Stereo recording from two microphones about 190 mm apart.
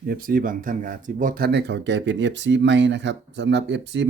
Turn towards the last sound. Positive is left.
turn(degrees=-65)  # may be behind; listen again after turning